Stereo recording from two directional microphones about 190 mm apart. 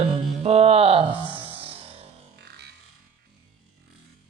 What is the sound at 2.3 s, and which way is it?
Music, 60° right (ahead or behind).